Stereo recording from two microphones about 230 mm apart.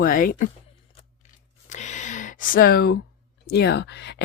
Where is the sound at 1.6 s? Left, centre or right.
Left.